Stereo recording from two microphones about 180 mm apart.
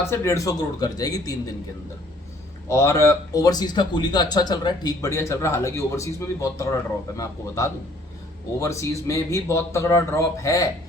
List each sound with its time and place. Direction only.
0.1 s speech: 15° left (ahead or behind)
2.6 s a man's voice: 15° left (ahead or behind)